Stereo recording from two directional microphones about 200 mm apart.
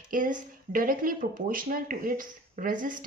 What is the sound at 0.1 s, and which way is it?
A woman's voice, 40° right (ahead or behind).